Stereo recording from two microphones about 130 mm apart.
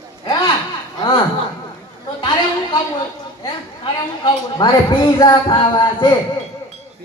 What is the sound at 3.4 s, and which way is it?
A woman's voice, 35° left (ahead or behind).